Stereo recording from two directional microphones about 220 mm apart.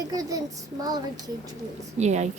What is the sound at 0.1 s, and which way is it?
Speech, 15° right (ahead or behind).